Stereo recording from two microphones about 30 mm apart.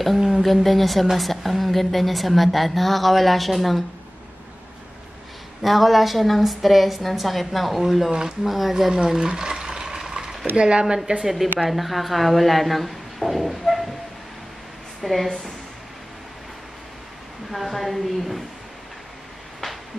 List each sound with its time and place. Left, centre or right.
0.3 s a woman's voice: centre
5.6 s a woman's voice: centre
8.1 s speech: right
8.5 s speech: centre
9.0 s speech: right
9.3 s stir: right
10.5 s speech: right
11.6 s a woman's voice: centre
15.0 s a woman's voice: centre
17.5 s a woman's voice: centre